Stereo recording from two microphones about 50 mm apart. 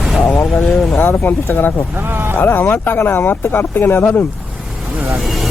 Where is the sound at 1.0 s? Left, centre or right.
Left.